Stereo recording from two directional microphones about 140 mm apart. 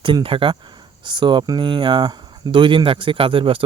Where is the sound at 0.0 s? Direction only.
35° right (ahead or behind).